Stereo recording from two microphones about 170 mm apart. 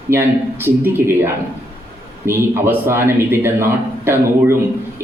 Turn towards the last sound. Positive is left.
turn(degrees=-15)  # may be behind; listen again after turning